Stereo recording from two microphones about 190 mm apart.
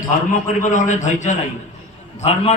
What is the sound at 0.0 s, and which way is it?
A man's voice, 40° left (ahead or behind).